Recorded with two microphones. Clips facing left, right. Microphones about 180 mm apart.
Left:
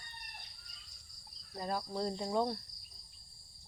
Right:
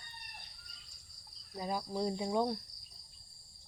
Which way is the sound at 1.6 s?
10° right (ahead or behind).